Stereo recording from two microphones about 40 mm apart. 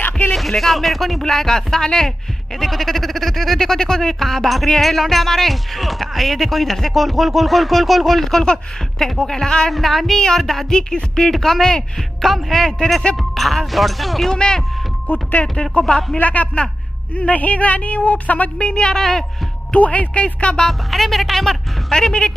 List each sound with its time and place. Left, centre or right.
0.3 s speech: centre
2.6 s speech: centre
10.7 s speech: centre
15.1 s speech: left
15.8 s speech: left
18.7 s speech: left
18.9 s speech: centre
19.7 s speech: left
20.6 s speech: centre
21.9 s speech: centre